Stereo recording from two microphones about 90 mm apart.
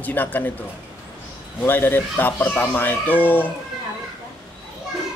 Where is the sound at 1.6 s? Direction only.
25° left (ahead or behind).